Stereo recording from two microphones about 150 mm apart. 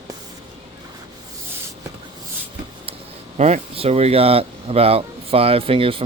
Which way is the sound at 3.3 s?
50° right (ahead or behind).